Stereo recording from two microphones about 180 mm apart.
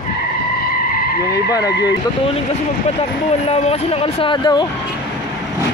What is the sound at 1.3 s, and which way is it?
Speech, 20° left (ahead or behind).